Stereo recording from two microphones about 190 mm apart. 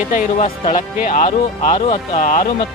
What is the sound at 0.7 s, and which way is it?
Speech, 45° left (ahead or behind).